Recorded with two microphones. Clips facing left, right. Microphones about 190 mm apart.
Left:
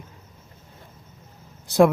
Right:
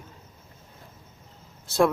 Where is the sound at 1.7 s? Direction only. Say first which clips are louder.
Left 5 dB; 15° left (ahead or behind).